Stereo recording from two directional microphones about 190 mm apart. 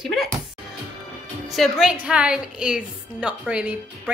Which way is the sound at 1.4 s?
Centre (ahead or behind).